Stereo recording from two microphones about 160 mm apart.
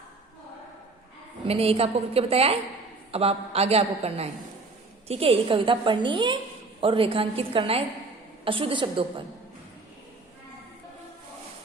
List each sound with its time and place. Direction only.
1.5 s a woman's voice: 35° right (ahead or behind)